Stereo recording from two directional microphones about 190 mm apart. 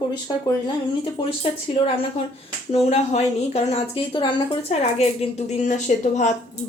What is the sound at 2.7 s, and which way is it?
A woman's voice, 35° left (ahead or behind).